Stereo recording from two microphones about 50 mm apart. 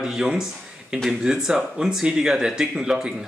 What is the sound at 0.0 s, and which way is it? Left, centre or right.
A man's voice, centre.